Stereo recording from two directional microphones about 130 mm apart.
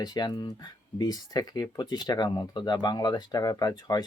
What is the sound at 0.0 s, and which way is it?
Speech, 30° left (ahead or behind).